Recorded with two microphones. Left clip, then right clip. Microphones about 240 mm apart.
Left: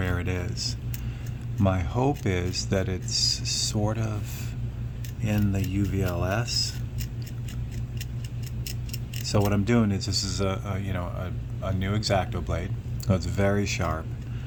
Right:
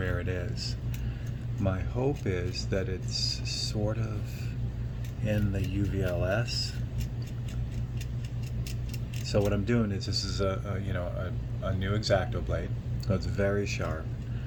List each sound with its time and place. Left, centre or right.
0.1 s a sound: left
1.7 s speech: left
5.3 s speech: left
9.2 s speech: left